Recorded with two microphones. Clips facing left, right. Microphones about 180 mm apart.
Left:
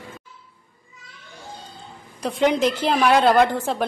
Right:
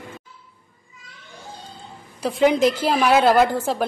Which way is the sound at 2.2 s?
5° right (ahead or behind).